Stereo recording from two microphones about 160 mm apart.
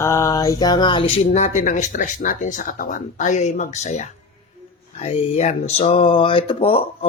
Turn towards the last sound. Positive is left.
turn(degrees=35)  # may be behind; listen again after turning